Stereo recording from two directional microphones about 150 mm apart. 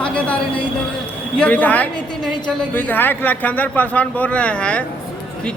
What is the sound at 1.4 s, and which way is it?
A man's voice, 10° left (ahead or behind).